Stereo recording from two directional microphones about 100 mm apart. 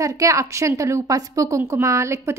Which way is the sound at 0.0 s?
30° right (ahead or behind).